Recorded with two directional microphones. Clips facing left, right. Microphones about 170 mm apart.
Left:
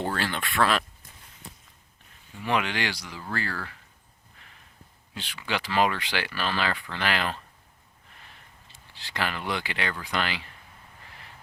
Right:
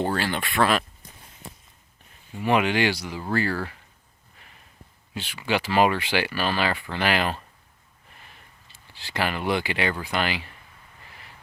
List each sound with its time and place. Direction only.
0.2 s speech: 5° right (ahead or behind)
2.4 s speech: 15° right (ahead or behind)
3.5 s speech: 25° right (ahead or behind)
5.1 s speech: 10° right (ahead or behind)
9.0 s speech: 10° right (ahead or behind)